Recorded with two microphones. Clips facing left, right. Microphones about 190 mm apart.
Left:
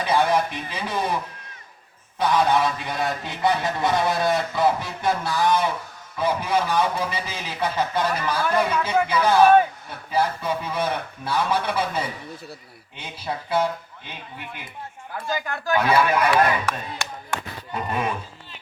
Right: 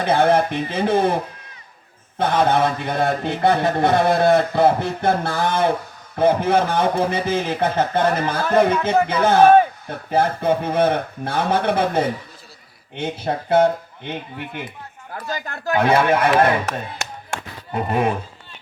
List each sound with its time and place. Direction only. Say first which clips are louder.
0.0 s a man's voice: right 4 dB; 55° right (ahead or behind)
15.8 s a man's voice: right 4 dB; 50° right (ahead or behind)